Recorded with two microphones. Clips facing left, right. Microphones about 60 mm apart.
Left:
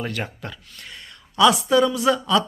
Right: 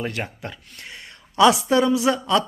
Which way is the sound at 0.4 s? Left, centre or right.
Right.